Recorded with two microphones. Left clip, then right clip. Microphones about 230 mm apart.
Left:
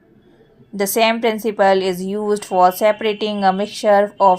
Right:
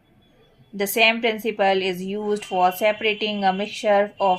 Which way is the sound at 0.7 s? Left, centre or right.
Left.